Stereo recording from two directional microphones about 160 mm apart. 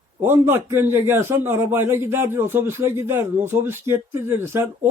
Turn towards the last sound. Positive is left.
turn(degrees=-15)  # may be behind; listen again after turning